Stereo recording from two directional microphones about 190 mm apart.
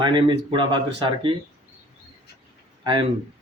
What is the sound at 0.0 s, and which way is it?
Speech, 25° right (ahead or behind).